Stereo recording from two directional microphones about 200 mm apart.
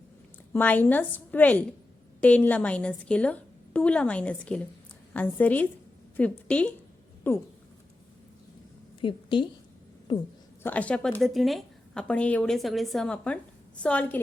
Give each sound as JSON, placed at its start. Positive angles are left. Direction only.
{"t": 0.5, "sound": "a woman's voice", "side_deg": 10}
{"t": 9.0, "sound": "a woman's voice", "side_deg": 25}
{"t": 10.6, "sound": "a woman's voice", "side_deg": 10}